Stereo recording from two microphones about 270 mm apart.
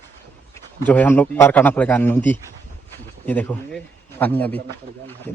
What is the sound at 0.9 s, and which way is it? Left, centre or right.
A man's voice, centre.